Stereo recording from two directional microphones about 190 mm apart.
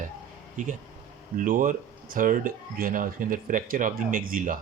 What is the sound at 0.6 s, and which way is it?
Speech, 45° right (ahead or behind).